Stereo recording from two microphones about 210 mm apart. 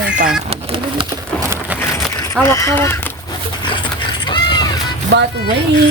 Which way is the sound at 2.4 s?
15° left (ahead or behind).